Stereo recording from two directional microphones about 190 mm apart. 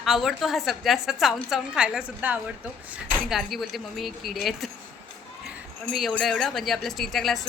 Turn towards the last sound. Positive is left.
turn(degrees=0)  # may be behind; listen again after turning